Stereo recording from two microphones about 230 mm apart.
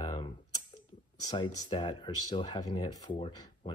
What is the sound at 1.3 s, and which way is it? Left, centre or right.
Speech, centre.